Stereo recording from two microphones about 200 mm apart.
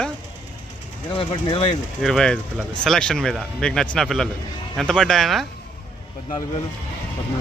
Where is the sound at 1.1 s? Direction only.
25° left (ahead or behind).